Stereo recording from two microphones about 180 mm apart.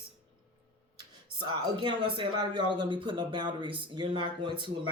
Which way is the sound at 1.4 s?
25° right (ahead or behind).